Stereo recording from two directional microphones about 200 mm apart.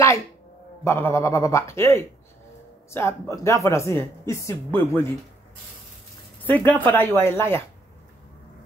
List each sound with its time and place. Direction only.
0.8 s speech: 10° left (ahead or behind)
6.4 s speech: 10° left (ahead or behind)